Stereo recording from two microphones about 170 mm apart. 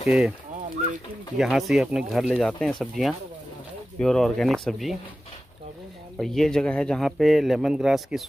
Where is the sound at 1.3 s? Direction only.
Centre (ahead or behind).